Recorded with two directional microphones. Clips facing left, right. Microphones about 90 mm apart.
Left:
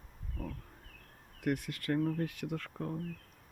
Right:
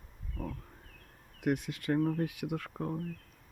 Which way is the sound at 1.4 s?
20° right (ahead or behind).